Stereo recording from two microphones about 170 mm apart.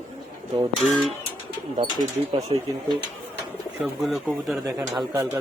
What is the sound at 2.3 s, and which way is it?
Speech, 35° right (ahead or behind).